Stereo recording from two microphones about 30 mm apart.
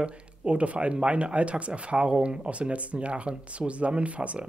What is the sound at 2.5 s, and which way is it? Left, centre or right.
Speech, right.